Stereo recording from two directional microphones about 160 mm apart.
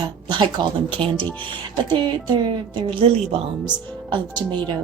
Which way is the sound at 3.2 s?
5° right (ahead or behind).